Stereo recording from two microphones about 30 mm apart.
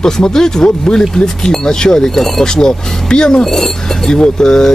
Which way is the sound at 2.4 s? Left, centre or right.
Left.